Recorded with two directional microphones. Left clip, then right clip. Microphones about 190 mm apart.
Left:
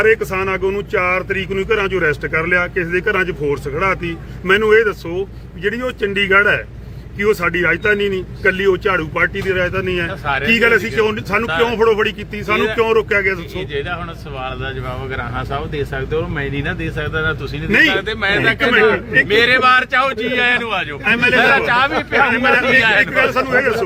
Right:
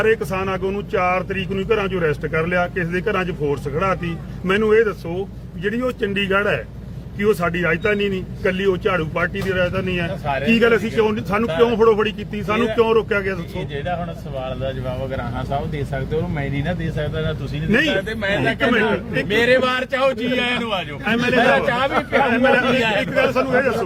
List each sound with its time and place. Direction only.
0.0 s speech: 15° left (ahead or behind)
16.1 s speech: 5° right (ahead or behind)
17.7 s speech: 15° left (ahead or behind)
17.9 s speech: 15° right (ahead or behind)
18.3 s speech: 20° left (ahead or behind)
19.3 s speech: 15° right (ahead or behind)
21.0 s a man's voice: 20° left (ahead or behind)
21.7 s speech: 10° right (ahead or behind)
22.3 s speech: 15° left (ahead or behind)
22.8 s speech: 15° right (ahead or behind)
23.1 s speech: 15° left (ahead or behind)